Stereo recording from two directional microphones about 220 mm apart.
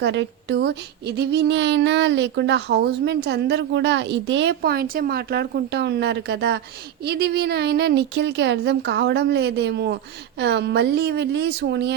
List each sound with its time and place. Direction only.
0.0 s speech: 55° right (ahead or behind)